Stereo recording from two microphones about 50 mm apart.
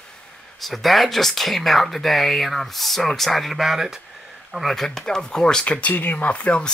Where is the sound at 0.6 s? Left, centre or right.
Centre.